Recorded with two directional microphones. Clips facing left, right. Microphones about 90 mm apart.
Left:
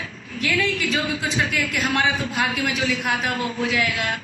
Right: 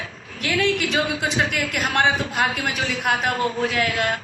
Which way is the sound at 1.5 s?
50° right (ahead or behind).